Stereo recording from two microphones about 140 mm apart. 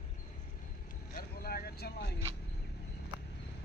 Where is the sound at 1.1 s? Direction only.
90° left.